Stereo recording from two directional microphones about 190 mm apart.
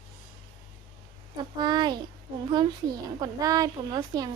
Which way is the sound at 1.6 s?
20° right (ahead or behind).